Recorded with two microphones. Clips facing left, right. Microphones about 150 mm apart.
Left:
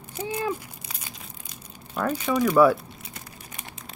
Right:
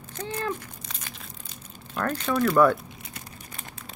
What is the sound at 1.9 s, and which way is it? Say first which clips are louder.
Speech: left 2 dB; 10° left (ahead or behind).